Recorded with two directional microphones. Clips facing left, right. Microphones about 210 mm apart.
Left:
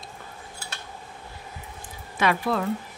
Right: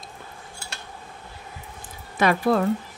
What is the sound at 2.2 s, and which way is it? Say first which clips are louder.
Speech: right 4 dB; 40° right (ahead or behind).